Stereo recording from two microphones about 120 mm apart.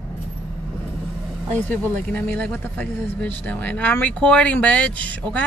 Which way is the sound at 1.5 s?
15° left (ahead or behind).